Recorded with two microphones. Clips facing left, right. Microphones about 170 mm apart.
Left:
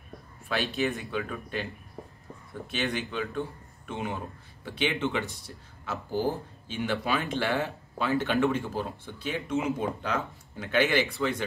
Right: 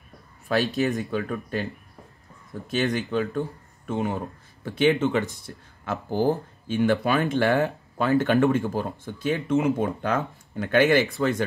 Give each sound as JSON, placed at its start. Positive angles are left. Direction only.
{"t": 0.5, "sound": "speech", "side_deg": -40}
{"t": 2.7, "sound": "speech", "side_deg": -40}
{"t": 6.7, "sound": "speech", "side_deg": -50}